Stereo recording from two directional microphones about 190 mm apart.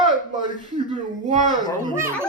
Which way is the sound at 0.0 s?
45° left (ahead or behind).